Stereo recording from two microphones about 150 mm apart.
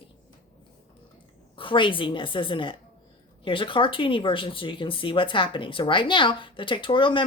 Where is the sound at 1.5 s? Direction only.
35° left (ahead or behind).